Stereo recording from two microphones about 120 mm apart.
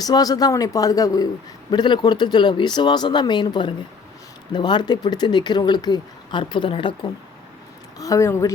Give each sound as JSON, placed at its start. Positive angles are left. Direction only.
{"t": 0.0, "sound": "speech", "side_deg": 30}
{"t": 7.9, "sound": "speech", "side_deg": 30}